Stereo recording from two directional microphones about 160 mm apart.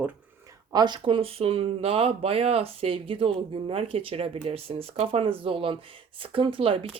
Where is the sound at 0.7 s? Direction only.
25° right (ahead or behind).